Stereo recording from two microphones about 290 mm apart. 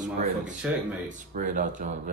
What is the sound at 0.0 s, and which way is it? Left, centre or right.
Speech, right.